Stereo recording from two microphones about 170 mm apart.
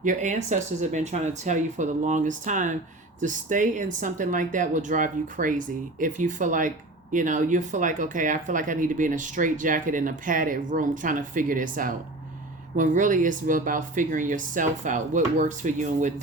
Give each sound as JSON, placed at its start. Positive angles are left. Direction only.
{"t": 0.0, "sound": "speech", "side_deg": -50}